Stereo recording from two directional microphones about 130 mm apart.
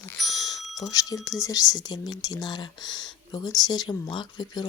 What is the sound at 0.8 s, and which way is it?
Speech, 30° left (ahead or behind).